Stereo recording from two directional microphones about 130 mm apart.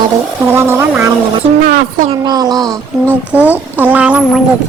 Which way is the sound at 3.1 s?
15° right (ahead or behind).